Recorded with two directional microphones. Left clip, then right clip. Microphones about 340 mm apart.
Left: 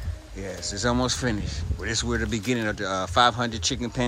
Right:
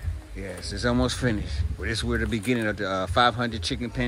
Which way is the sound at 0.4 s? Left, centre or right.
Centre.